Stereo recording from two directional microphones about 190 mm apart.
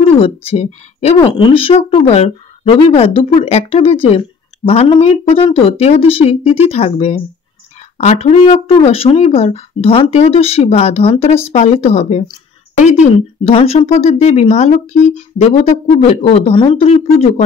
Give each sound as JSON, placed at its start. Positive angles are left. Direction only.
{"t": 0.0, "sound": "a woman's voice", "side_deg": 30}